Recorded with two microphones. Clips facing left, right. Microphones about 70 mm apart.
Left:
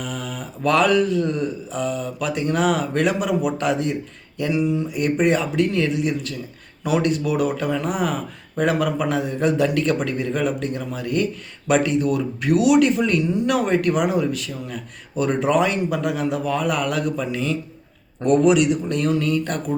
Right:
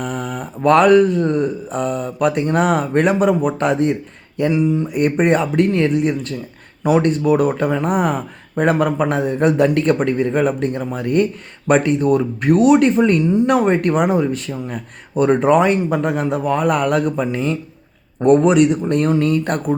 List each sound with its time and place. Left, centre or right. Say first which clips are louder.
0.0 s a man's voice: right 5 dB; right
4.5 s speech: right 2 dB; right
4.9 s a man's voice: right 4 dB; right